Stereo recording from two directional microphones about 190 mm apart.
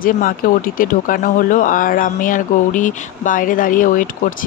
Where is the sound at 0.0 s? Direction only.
45° left (ahead or behind).